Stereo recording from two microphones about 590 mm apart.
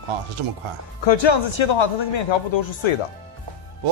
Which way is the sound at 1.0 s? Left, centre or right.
Left.